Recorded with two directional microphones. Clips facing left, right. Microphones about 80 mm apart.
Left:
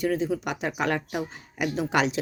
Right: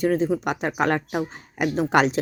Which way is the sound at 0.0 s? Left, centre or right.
Right.